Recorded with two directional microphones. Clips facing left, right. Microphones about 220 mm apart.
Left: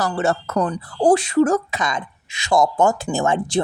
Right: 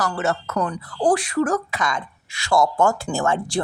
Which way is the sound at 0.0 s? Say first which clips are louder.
Left 3 dB; 30° left (ahead or behind).